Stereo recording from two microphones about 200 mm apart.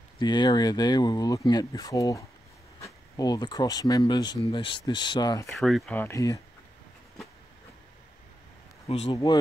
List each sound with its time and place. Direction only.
0.2 s speech: 20° left (ahead or behind)
5.6 s speech: centre (ahead or behind)
8.8 s speech: 30° left (ahead or behind)
9.1 s speech: 20° left (ahead or behind)